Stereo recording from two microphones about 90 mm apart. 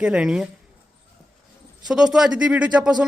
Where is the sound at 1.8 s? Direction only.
5° right (ahead or behind).